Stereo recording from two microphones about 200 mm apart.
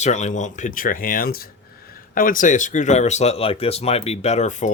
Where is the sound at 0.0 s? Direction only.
35° left (ahead or behind).